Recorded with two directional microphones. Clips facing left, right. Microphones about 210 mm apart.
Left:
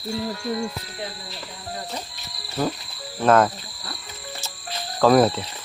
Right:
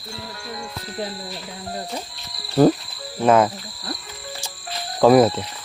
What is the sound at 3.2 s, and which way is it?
Speech, 10° right (ahead or behind).